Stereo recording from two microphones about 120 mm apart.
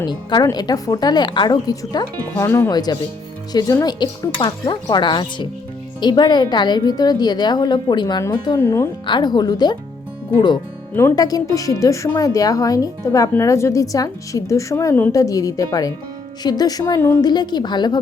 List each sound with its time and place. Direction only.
0.0 s a woman's voice: 40° left (ahead or behind)
2.7 s a woman's voice: 35° left (ahead or behind)
8.6 s speech: 25° left (ahead or behind)
9.0 s a woman's voice: 40° left (ahead or behind)